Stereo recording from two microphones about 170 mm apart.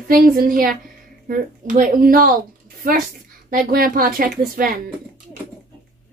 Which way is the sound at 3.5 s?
60° right (ahead or behind).